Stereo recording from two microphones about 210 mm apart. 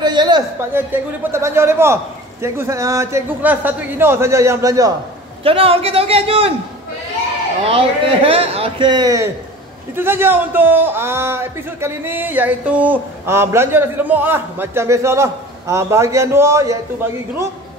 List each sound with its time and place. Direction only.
0.0 s a man's voice: 20° right (ahead or behind)
5.4 s a man's voice: 25° right (ahead or behind)
7.6 s a man's voice: 25° right (ahead or behind)